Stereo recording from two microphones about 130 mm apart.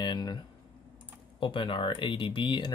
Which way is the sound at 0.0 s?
35° left (ahead or behind).